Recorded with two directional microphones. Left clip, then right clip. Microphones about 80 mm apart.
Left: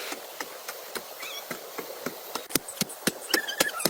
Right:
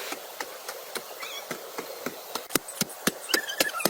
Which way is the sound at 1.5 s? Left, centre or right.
Centre.